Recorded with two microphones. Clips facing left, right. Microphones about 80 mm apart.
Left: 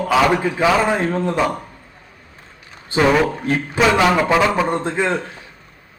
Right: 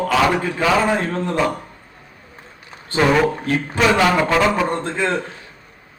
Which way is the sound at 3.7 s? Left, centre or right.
Centre.